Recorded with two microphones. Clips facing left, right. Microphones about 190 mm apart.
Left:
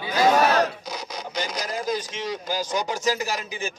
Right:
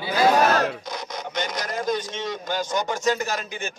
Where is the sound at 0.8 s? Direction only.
10° left (ahead or behind).